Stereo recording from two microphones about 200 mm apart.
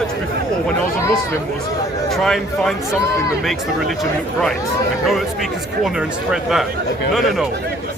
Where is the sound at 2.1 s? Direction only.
Centre (ahead or behind).